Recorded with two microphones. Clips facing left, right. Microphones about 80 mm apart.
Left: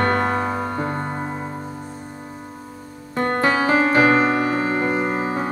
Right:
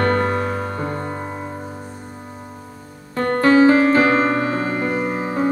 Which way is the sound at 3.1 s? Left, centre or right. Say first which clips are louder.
Right 5 dB; centre.